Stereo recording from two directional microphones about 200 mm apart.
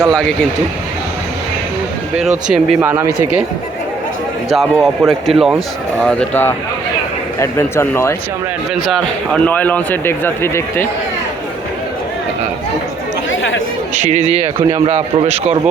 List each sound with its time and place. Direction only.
0.0 s speech: 5° left (ahead or behind)
2.1 s speech: 5° right (ahead or behind)
4.4 s a man's voice: centre (ahead or behind)
13.3 s chatter: 70° left (ahead or behind)
13.9 s a man's voice: 35° right (ahead or behind)